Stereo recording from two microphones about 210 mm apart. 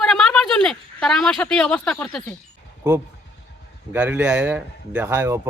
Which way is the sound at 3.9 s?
5° right (ahead or behind).